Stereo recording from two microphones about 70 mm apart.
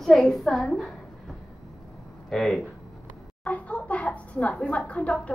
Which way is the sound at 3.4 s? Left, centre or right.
Centre.